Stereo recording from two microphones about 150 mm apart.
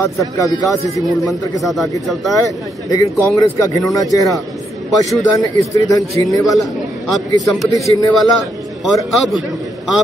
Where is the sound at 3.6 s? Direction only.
25° left (ahead or behind).